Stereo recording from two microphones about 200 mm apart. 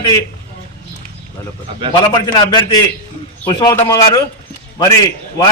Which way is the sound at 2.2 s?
20° left (ahead or behind).